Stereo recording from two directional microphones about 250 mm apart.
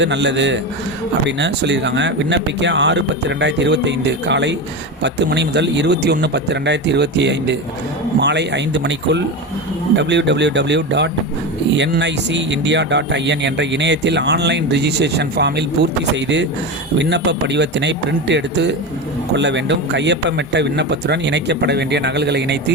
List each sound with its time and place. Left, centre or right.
0.0 s speech: right
17.0 s speech: right